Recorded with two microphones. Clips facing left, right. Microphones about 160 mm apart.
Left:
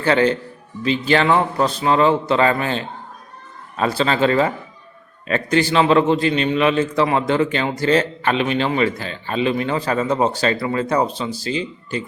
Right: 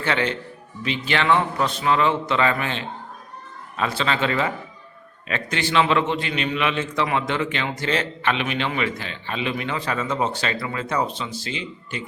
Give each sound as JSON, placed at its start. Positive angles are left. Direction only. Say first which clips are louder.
{"t": 0.0, "sound": "a man's voice", "louder": "left 7 dB", "side_deg": 35}